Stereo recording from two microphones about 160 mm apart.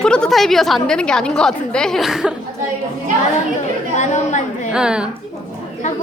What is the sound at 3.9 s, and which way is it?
Speech, 45° left (ahead or behind).